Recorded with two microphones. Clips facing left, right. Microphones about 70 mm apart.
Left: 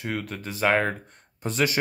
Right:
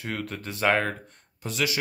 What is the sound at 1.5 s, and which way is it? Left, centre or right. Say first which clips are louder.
Speech: left 3 dB; left.